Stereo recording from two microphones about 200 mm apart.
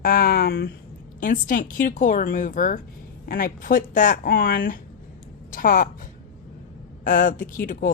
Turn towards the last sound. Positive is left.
turn(degrees=45)  # may be behind; listen again after turning